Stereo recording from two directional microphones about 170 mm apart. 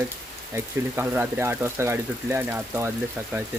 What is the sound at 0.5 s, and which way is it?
Speech, 10° right (ahead or behind).